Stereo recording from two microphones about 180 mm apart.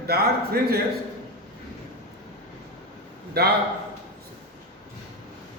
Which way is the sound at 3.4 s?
65° right (ahead or behind).